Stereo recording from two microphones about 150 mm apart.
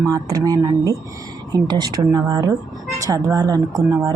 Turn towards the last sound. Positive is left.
turn(degrees=-20)  # may be behind; listen again after turning